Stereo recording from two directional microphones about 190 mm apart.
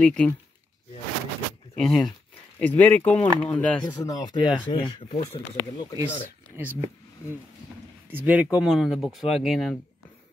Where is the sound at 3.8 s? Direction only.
20° left (ahead or behind).